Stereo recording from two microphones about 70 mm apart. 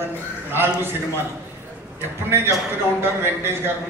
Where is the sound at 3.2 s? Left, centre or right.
Right.